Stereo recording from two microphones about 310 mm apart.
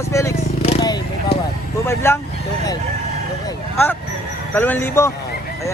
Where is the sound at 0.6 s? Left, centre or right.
Centre.